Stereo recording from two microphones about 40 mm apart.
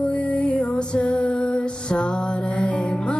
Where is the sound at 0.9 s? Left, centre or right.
Left.